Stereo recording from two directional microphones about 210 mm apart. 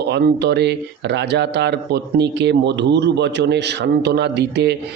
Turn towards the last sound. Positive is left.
turn(degrees=-55)  # may be behind; listen again after turning